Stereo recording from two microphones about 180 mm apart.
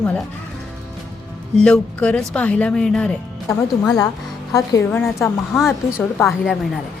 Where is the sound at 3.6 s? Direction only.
20° left (ahead or behind).